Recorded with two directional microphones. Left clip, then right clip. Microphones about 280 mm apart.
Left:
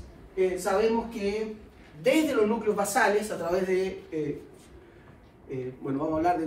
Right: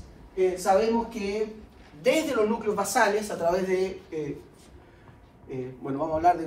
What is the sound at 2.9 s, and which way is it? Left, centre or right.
A man's voice, centre.